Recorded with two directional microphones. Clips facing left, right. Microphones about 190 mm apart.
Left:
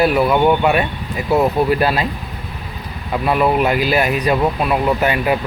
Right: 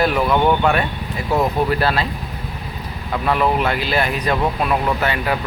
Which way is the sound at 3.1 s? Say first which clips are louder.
Left 2 dB; 10° left (ahead or behind).